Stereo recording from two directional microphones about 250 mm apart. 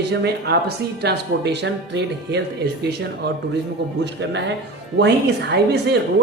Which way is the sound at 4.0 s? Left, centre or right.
Right.